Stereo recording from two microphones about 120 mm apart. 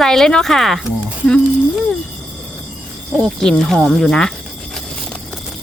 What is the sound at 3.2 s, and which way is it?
Speech, 5° left (ahead or behind).